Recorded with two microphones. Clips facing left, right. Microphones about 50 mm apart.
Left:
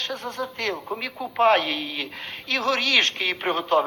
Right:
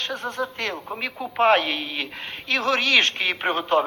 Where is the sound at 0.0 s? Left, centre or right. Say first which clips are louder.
Right 2 dB; right.